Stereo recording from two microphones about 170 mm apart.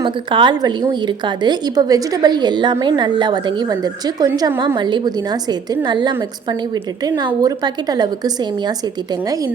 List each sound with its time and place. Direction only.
0.0 s a woman's voice: 30° right (ahead or behind)